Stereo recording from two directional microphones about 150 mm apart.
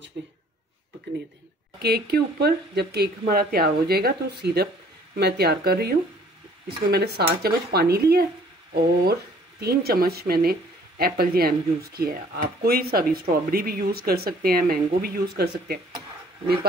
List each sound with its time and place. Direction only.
1.8 s speech: 90° right
9.6 s speech: 90° right